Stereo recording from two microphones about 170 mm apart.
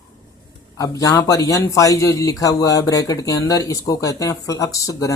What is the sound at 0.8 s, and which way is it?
Speech, 20° left (ahead or behind).